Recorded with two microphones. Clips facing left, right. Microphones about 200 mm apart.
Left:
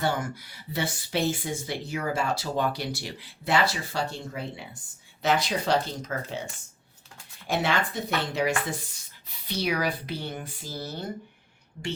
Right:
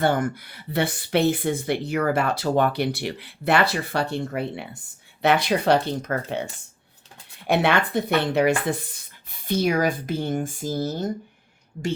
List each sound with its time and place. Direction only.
0.0 s speech: 55° right (ahead or behind)